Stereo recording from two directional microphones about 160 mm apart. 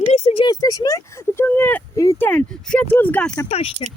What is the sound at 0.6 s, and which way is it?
Speech, 20° left (ahead or behind).